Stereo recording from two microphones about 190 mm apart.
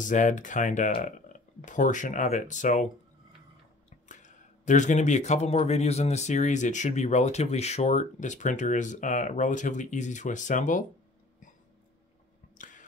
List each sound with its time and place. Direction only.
0.0 s speech: 40° left (ahead or behind)
4.1 s speech: 40° left (ahead or behind)
12.5 s a sound: 45° left (ahead or behind)